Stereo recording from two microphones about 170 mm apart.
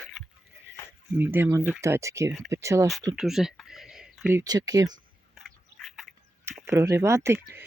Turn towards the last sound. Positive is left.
turn(degrees=-15)  # may be behind; listen again after turning